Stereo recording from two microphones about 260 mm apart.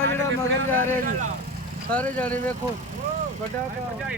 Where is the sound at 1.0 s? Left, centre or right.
Right.